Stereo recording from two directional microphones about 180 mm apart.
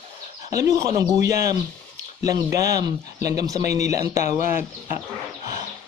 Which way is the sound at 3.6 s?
65° right (ahead or behind).